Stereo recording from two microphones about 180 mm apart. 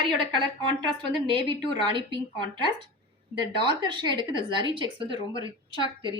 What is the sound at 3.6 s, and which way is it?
Speech, 25° right (ahead or behind).